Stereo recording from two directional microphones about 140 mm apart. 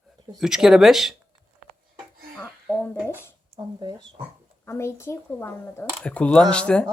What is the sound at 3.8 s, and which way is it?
Speech, 30° right (ahead or behind).